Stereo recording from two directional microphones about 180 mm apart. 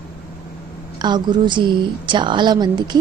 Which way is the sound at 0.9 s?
25° right (ahead or behind).